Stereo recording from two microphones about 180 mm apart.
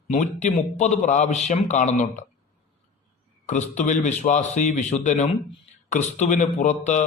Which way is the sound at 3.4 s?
40° left (ahead or behind).